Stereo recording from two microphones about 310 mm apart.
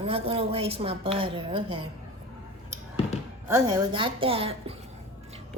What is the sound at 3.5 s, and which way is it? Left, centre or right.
A woman's voice, centre.